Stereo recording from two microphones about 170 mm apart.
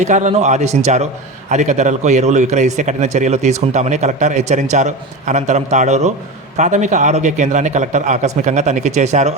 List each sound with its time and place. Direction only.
0.0 s a man's voice: 45° right (ahead or behind)